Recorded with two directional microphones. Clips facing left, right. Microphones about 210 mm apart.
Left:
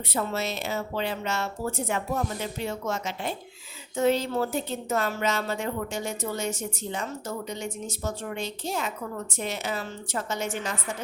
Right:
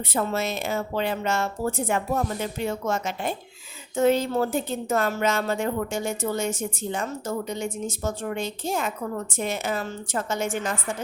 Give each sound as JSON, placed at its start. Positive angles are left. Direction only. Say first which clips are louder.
{"t": 0.1, "sound": "a woman's voice", "louder": "right 3 dB", "side_deg": -50}